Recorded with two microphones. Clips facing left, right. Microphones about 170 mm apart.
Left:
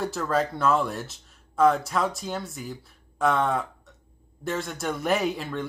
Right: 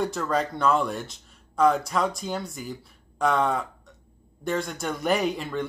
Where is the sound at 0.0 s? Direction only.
Centre (ahead or behind).